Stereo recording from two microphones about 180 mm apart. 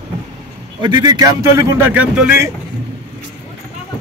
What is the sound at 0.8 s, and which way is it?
A man's voice, 25° right (ahead or behind).